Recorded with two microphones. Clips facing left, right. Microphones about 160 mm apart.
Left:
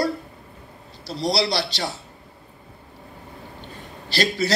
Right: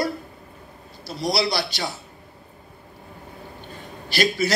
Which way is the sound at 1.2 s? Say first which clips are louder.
Left 1 dB; 35° left (ahead or behind).